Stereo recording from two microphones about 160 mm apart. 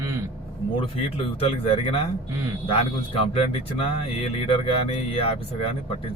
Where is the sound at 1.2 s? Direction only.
35° left (ahead or behind).